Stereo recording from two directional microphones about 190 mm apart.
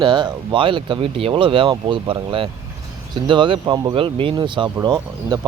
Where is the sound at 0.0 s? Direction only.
25° right (ahead or behind).